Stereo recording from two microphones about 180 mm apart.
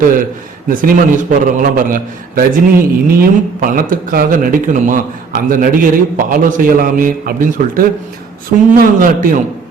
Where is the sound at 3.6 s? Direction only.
50° right (ahead or behind).